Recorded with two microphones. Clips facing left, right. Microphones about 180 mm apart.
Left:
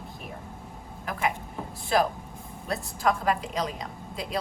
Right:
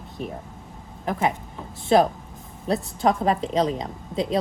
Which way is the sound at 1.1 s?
30° right (ahead or behind).